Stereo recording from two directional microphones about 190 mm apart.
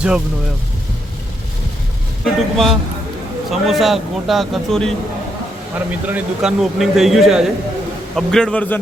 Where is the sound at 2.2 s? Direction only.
Centre (ahead or behind).